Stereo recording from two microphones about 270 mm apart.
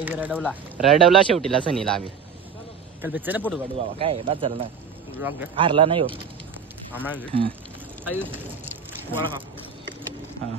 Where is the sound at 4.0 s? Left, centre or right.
Centre.